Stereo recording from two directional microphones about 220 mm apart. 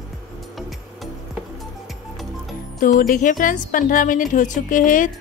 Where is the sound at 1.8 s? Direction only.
Centre (ahead or behind).